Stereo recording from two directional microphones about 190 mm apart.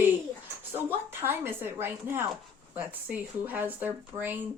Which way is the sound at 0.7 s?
10° right (ahead or behind).